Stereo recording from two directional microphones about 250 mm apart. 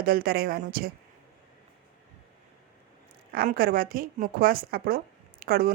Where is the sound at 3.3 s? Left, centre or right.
Right.